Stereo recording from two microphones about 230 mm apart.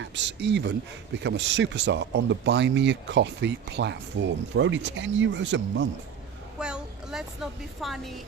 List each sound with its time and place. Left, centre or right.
0.0 s speech: right
6.6 s a woman's voice: centre